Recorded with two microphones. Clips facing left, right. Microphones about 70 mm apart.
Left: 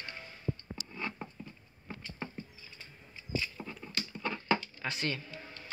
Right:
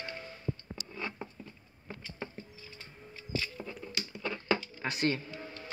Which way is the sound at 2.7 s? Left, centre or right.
Right.